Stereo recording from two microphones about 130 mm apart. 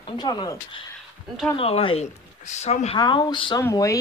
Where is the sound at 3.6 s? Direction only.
25° left (ahead or behind).